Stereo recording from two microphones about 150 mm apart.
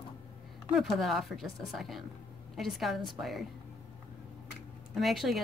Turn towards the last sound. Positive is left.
turn(degrees=0)  # may be behind; listen again after turning